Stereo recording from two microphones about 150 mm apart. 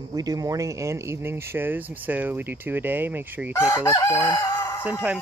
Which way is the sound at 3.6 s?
20° left (ahead or behind).